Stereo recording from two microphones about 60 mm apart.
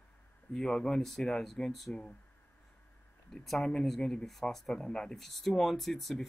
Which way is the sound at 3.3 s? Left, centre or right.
Centre.